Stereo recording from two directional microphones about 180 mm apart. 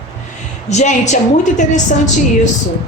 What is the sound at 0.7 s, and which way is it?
A woman's voice, 40° left (ahead or behind).